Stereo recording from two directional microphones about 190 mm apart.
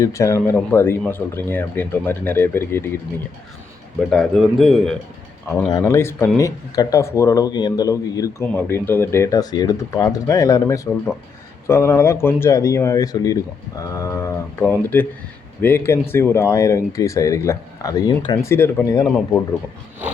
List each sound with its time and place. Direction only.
0.0 s speech: 15° left (ahead or behind)
4.1 s speech: centre (ahead or behind)
5.5 s speech: 15° left (ahead or behind)
18.5 s speech: 10° left (ahead or behind)